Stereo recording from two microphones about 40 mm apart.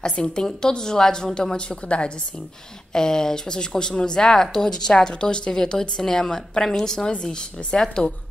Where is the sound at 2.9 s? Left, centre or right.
Centre.